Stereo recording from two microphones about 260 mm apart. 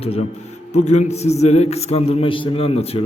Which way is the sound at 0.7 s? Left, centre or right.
Left.